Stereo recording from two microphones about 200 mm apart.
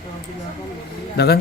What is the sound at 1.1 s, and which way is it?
Speech, 55° left (ahead or behind).